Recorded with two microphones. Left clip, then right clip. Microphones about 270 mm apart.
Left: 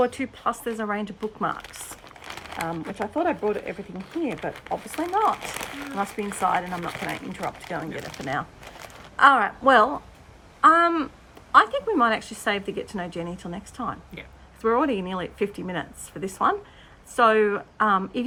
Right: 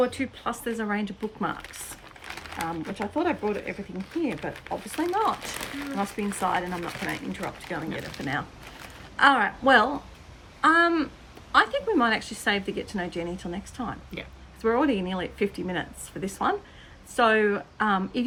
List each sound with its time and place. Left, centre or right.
0.0 s speech: centre